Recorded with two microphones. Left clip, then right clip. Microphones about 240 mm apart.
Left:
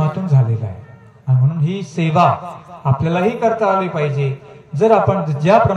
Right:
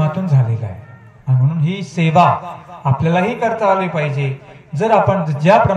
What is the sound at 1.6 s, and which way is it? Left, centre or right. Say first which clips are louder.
A man's voice: right 3 dB; right.